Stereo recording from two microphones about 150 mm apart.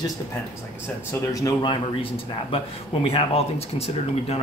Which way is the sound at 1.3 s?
25° left (ahead or behind).